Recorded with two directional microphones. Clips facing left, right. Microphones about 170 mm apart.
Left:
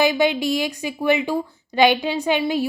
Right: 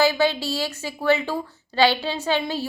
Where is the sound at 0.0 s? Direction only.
15° left (ahead or behind).